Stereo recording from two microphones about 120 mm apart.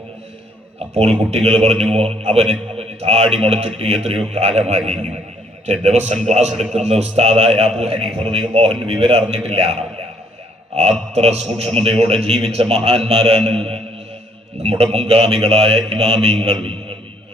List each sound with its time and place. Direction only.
0.9 s a man's voice: 55° right (ahead or behind)
6.2 s a man's voice: 70° right (ahead or behind)
11.1 s a man's voice: 60° right (ahead or behind)